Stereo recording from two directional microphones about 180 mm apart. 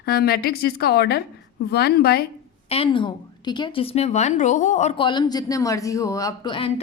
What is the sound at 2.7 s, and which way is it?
A woman's voice, 30° left (ahead or behind).